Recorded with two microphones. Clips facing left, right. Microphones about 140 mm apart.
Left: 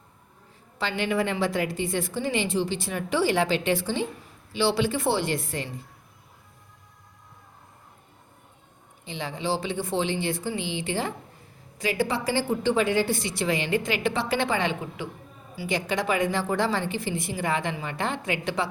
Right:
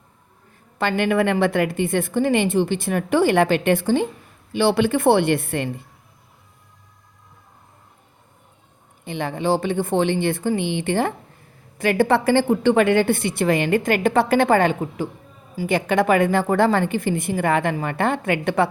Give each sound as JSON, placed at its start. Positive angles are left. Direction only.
{"t": 0.8, "sound": "a woman's voice", "side_deg": -55}
{"t": 9.0, "sound": "a woman's voice", "side_deg": -55}